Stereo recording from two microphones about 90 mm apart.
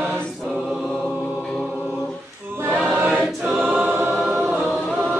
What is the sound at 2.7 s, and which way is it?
Choir, 15° right (ahead or behind).